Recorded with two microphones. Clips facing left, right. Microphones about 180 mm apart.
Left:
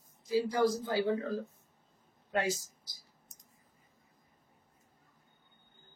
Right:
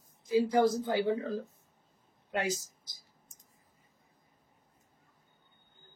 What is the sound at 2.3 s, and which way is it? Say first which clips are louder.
Speech: left 1 dB; 20° right (ahead or behind).